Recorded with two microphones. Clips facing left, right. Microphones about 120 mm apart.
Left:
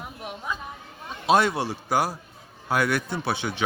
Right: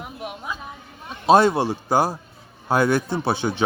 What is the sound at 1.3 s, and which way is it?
A man's voice, 30° right (ahead or behind).